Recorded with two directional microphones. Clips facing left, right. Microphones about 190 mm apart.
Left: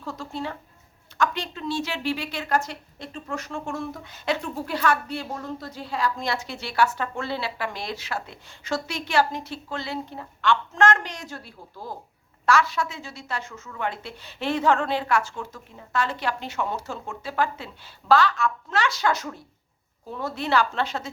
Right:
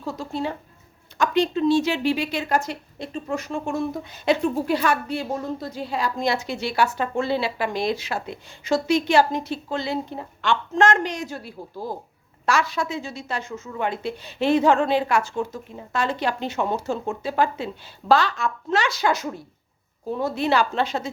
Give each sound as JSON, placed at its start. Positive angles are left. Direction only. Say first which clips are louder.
{"t": 0.0, "sound": "a woman's voice", "louder": "right 4 dB", "side_deg": -10}